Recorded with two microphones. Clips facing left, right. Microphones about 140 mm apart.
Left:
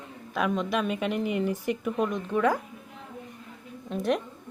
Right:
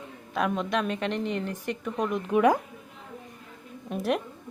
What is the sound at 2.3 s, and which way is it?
Speech, 20° right (ahead or behind).